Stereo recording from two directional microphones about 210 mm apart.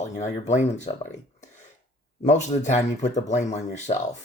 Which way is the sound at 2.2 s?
35° left (ahead or behind).